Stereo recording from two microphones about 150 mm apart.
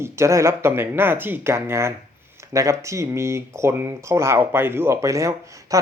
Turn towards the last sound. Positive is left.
turn(degrees=-20)  # may be behind; listen again after turning